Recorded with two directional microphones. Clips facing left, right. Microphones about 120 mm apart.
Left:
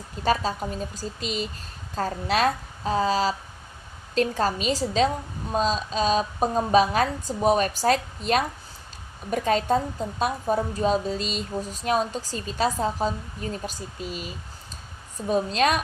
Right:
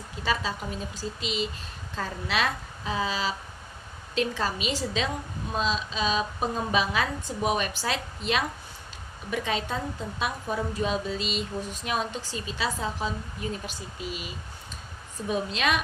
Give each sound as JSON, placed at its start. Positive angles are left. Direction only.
{"t": 0.2, "sound": "a woman's voice", "side_deg": 45}